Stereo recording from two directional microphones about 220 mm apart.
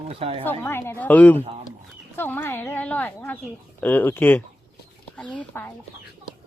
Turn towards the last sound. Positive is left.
turn(degrees=5)  # may be behind; listen again after turning